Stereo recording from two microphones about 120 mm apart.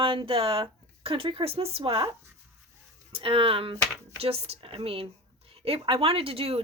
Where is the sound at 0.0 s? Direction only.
45° right (ahead or behind).